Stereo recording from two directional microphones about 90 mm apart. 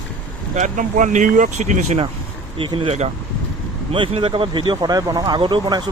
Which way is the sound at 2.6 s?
85° right.